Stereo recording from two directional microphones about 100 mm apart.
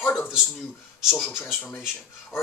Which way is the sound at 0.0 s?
20° left (ahead or behind).